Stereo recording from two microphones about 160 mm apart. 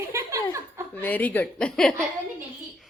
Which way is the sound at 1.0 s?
10° left (ahead or behind).